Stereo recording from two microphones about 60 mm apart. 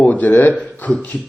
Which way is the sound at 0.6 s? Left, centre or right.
Left.